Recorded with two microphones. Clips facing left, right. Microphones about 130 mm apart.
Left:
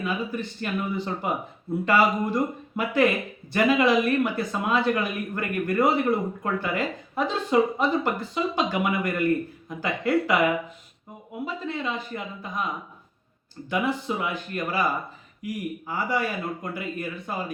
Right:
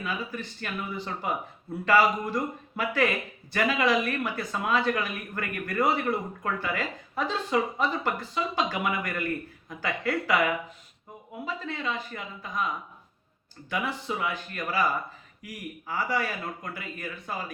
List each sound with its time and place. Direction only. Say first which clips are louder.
0.0 s speech: left 5 dB; 20° left (ahead or behind)
1.8 s speech: left 1 dB; 20° left (ahead or behind)
13.7 s speech: left 5 dB; 25° left (ahead or behind)